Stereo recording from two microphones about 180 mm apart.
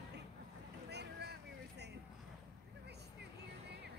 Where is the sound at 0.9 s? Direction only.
65° right (ahead or behind).